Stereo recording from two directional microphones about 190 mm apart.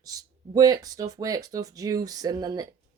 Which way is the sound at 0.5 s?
20° right (ahead or behind).